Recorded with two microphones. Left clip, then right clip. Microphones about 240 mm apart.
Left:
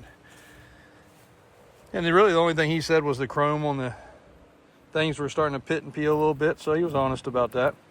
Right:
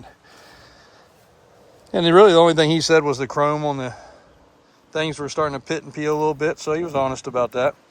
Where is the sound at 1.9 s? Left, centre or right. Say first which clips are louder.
Right 8 dB; right.